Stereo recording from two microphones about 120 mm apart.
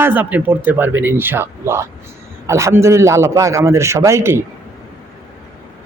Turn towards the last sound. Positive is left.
turn(degrees=-25)  # may be behind; listen again after turning